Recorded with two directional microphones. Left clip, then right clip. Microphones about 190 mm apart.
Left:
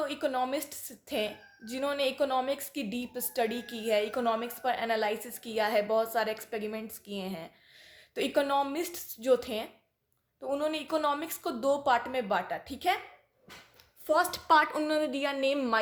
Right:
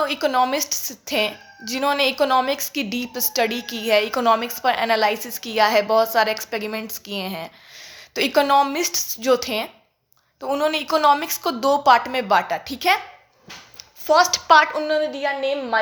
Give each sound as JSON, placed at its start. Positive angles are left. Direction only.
{"t": 0.0, "sound": "a woman's voice", "side_deg": -5}
{"t": 14.0, "sound": "a woman's voice", "side_deg": 15}
{"t": 14.3, "sound": "a woman's voice", "side_deg": 25}